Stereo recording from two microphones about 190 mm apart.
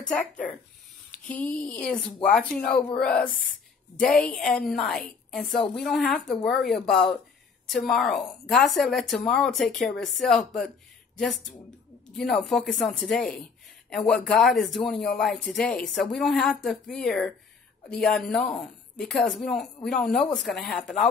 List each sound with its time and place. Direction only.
0.0 s speech: 5° left (ahead or behind)